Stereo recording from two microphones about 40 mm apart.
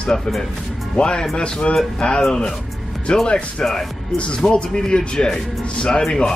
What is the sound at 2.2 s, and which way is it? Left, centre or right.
Speech, centre.